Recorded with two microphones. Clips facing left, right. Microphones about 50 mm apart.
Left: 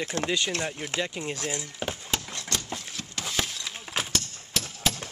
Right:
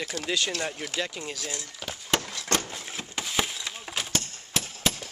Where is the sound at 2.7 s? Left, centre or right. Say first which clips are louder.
Left 1 dB; right.